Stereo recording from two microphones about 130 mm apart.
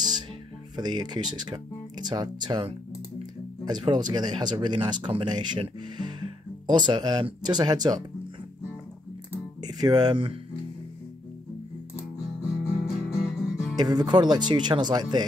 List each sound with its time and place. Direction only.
0.7 s speech: 35° right (ahead or behind)
9.6 s speech: 30° right (ahead or behind)
12.8 s music: 5° right (ahead or behind)
13.7 s speech: 30° right (ahead or behind)